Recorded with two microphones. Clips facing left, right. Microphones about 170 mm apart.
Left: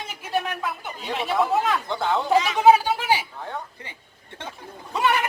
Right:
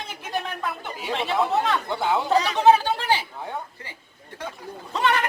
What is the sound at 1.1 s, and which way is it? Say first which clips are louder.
Speech: left 1 dB; 5° left (ahead or behind).